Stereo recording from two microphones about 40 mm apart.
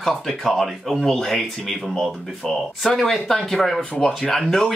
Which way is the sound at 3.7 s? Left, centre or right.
Centre.